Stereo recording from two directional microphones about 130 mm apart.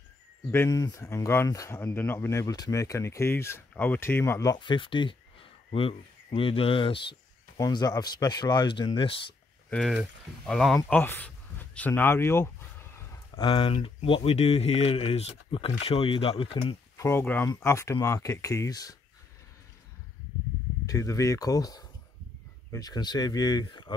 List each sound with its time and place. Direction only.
0.5 s speech: 20° left (ahead or behind)
4.6 s speech: 40° left (ahead or behind)
7.5 s speech: 30° left (ahead or behind)
9.7 s speech: 5° left (ahead or behind)
10.9 s speech: 15° left (ahead or behind)
13.4 s speech: 40° left (ahead or behind)
16.9 s speech: 20° left (ahead or behind)
20.8 s speech: 25° left (ahead or behind)